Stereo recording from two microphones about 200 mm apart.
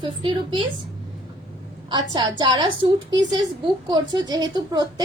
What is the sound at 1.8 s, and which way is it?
Speech, 20° right (ahead or behind).